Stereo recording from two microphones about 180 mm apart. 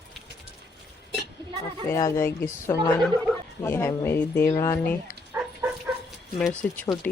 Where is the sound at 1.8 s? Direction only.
15° left (ahead or behind).